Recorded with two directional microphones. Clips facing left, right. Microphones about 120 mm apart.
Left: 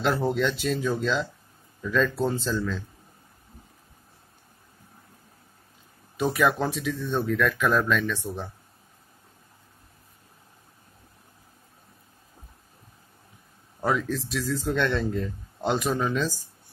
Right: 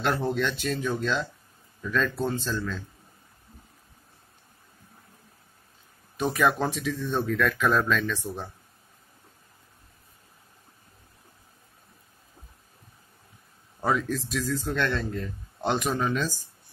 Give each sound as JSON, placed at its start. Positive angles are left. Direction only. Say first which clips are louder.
{"t": 0.0, "sound": "speech", "louder": "left 2 dB", "side_deg": 5}
{"t": 0.7, "sound": "speech", "louder": "left 2 dB", "side_deg": 15}
{"t": 1.8, "sound": "speech", "louder": "left 3 dB", "side_deg": 0}
{"t": 2.2, "sound": "speech", "louder": "left 2 dB", "side_deg": 15}
{"t": 6.3, "sound": "speech", "louder": "even", "side_deg": 0}
{"t": 13.8, "sound": "speech", "louder": "even", "side_deg": -5}
{"t": 14.6, "sound": "speech", "louder": "left 3 dB", "side_deg": 15}
{"t": 15.2, "sound": "speech", "louder": "left 1 dB", "side_deg": 0}